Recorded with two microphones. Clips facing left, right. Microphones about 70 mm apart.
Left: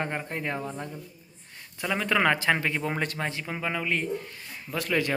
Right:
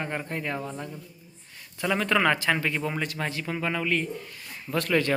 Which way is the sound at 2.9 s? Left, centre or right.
Left.